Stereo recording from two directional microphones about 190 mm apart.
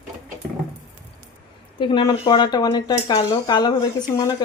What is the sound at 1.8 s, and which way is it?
Speech, 25° left (ahead or behind).